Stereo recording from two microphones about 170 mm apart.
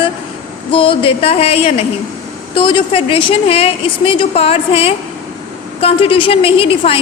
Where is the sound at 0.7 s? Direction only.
30° left (ahead or behind).